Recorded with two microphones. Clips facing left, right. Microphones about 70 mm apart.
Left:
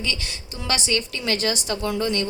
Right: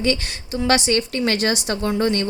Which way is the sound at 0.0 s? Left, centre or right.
Right.